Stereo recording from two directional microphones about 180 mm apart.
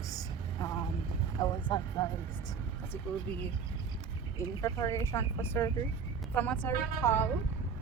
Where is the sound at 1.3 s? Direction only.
20° left (ahead or behind).